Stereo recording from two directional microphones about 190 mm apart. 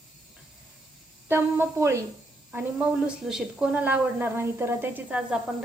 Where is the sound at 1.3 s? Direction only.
15° right (ahead or behind).